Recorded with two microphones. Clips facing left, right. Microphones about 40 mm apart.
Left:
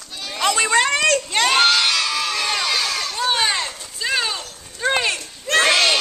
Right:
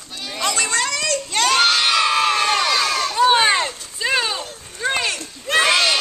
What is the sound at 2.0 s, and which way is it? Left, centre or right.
Crowd, right.